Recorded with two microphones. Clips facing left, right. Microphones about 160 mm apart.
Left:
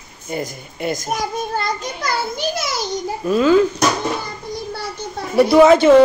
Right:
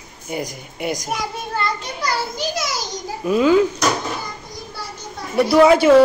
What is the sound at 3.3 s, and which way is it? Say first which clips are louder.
Speech: left 1 dB; 10° right (ahead or behind).